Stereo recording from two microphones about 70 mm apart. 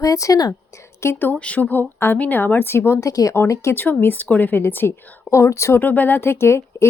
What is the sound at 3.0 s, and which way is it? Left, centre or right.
Speech, left.